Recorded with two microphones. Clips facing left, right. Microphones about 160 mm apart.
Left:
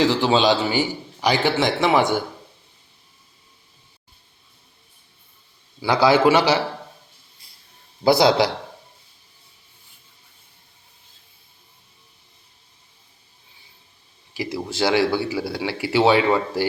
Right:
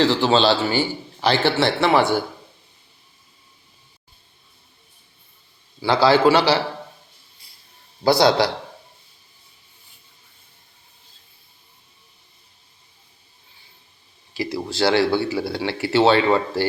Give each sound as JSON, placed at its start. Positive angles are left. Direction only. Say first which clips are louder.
{"t": 0.0, "sound": "speech", "louder": "right 1 dB", "side_deg": 10}
{"t": 5.8, "sound": "a man's voice", "louder": "right 1 dB", "side_deg": 15}
{"t": 8.0, "sound": "a man's voice", "louder": "even", "side_deg": 20}
{"t": 14.3, "sound": "speech", "louder": "right 1 dB", "side_deg": 20}